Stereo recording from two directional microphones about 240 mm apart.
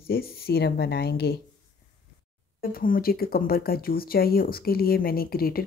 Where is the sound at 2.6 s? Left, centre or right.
Left.